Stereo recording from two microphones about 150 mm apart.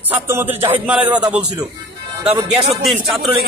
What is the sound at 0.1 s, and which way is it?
A man's voice, 15° right (ahead or behind).